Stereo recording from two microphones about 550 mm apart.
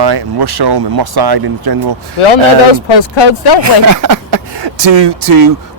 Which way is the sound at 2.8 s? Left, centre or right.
Left.